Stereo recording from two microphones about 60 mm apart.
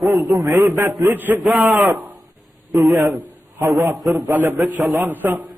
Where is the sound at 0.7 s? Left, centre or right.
Right.